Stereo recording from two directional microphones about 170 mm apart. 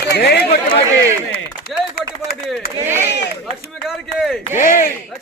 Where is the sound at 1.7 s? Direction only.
Centre (ahead or behind).